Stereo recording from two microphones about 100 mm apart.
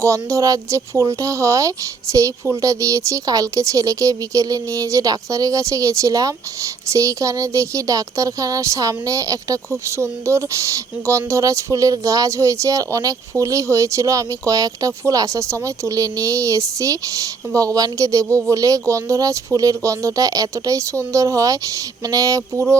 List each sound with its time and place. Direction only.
0.0 s speech: 30° right (ahead or behind)